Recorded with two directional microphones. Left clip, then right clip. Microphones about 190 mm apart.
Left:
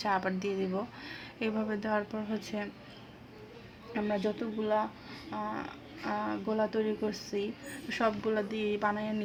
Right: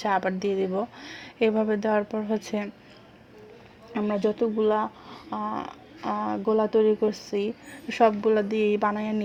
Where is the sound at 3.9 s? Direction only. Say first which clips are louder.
Right 6 dB; 40° right (ahead or behind).